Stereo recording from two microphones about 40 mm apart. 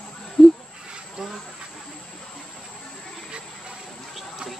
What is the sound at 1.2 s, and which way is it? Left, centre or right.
Hiss, centre.